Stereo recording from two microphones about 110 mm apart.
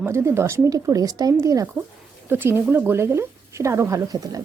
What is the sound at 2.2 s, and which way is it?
Speech, 20° right (ahead or behind).